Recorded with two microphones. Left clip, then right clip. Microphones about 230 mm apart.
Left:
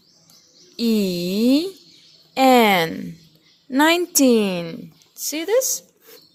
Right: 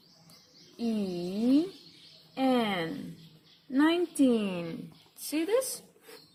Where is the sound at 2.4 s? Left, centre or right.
Left.